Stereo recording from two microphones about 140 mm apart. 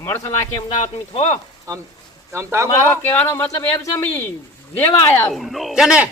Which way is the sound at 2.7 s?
15° left (ahead or behind).